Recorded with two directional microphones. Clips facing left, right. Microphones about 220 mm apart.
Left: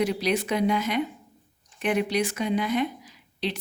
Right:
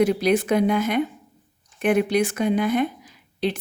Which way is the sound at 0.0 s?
50° right (ahead or behind).